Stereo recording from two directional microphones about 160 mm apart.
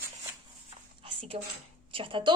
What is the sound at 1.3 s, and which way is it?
Speech, 35° right (ahead or behind).